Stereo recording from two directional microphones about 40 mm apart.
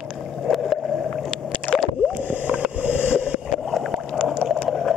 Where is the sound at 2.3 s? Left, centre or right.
Right.